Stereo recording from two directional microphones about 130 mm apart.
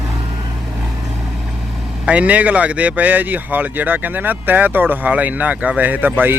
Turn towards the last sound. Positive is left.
turn(degrees=-10)  # may be behind; listen again after turning